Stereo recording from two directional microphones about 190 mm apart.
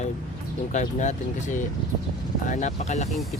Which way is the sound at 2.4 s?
40° left (ahead or behind).